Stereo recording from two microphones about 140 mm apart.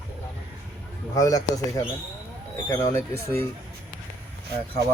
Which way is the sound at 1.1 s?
25° left (ahead or behind).